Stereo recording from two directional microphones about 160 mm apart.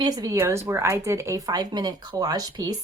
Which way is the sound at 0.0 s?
25° right (ahead or behind).